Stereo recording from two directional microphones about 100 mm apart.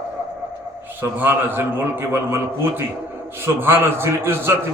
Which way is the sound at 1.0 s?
25° right (ahead or behind).